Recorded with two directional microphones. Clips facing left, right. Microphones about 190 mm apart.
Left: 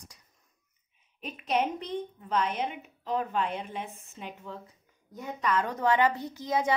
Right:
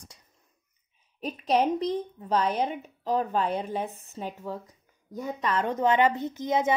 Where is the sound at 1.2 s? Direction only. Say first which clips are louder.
Right 5 dB; 35° right (ahead or behind).